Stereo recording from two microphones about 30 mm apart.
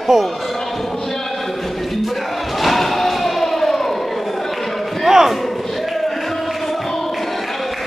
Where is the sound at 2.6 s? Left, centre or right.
Centre.